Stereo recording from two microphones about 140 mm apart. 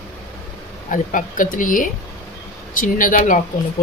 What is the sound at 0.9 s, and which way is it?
Speech, 70° left (ahead or behind).